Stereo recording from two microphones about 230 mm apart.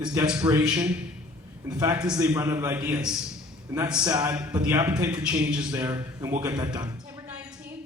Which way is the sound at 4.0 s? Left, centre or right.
Centre.